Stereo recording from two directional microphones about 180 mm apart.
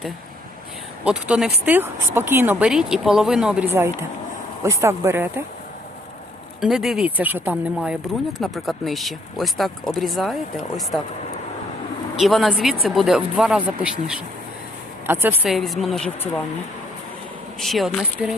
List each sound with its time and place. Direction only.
1.0 s speech: 5° right (ahead or behind)
6.6 s speech: centre (ahead or behind)
12.1 s speech: centre (ahead or behind)
15.5 s speech: centre (ahead or behind)
17.6 s speech: centre (ahead or behind)